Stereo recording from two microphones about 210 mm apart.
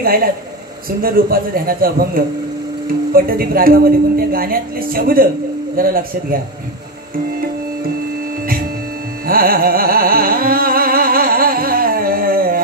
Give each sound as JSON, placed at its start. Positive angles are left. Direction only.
{"t": 0.0, "sound": "a woman's voice", "side_deg": -45}
{"t": 9.2, "sound": "carnatic music", "side_deg": -45}